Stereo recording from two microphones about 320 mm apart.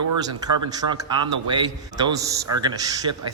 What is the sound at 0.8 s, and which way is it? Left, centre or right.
Speech, right.